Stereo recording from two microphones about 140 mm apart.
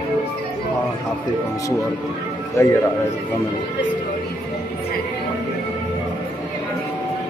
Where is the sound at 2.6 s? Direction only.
20° left (ahead or behind).